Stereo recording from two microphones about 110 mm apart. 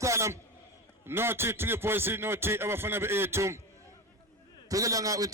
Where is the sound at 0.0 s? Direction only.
25° right (ahead or behind).